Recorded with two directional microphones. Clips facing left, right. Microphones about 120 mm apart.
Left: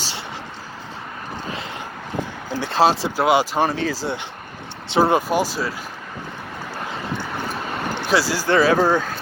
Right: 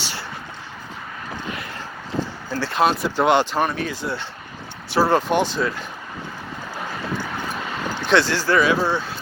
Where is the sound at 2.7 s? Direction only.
30° left (ahead or behind).